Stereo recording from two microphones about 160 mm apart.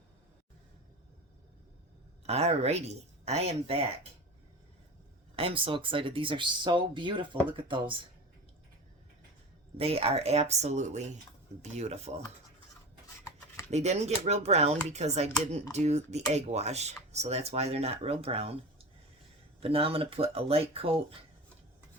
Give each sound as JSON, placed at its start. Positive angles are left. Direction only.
{"t": 2.2, "sound": "speech", "side_deg": -40}
{"t": 5.4, "sound": "speech", "side_deg": -35}
{"t": 9.7, "sound": "speech", "side_deg": -40}
{"t": 13.7, "sound": "speech", "side_deg": -45}
{"t": 19.5, "sound": "speech", "side_deg": -35}